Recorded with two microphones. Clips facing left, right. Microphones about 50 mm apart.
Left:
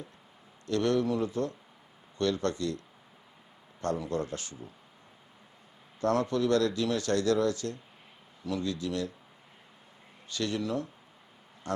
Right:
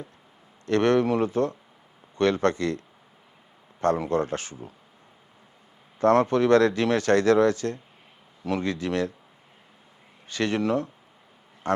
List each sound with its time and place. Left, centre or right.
0.6 s speech: right
6.0 s speech: right
10.3 s speech: right